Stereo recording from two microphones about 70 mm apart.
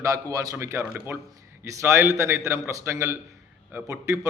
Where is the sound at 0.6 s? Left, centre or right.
Right.